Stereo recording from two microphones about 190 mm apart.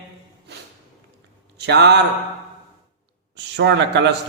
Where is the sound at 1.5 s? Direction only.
65° right (ahead or behind).